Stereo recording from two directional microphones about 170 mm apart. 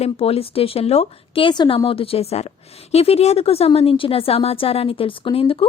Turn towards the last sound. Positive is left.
turn(degrees=30)  # may be behind; listen again after turning